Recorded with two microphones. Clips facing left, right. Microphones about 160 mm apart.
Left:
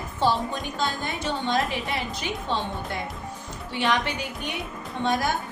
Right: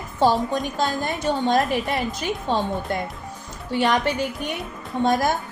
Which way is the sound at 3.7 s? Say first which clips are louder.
Right 5 dB; 40° right (ahead or behind).